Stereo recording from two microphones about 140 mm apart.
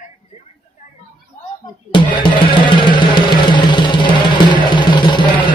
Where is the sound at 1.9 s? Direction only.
35° left (ahead or behind).